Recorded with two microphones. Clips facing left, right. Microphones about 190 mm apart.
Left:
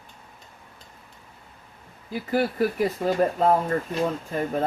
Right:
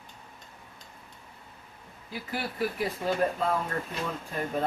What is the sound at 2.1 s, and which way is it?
Speech, 45° left (ahead or behind).